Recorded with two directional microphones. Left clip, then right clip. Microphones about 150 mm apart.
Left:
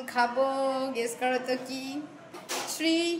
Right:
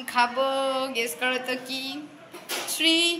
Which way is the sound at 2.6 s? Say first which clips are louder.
Right 6 dB; 10° left (ahead or behind).